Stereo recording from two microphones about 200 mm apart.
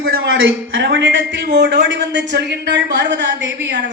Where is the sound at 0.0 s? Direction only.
70° right (ahead or behind).